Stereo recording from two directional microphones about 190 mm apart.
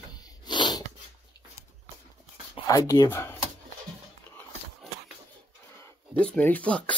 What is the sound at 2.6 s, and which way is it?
Speech, 20° left (ahead or behind).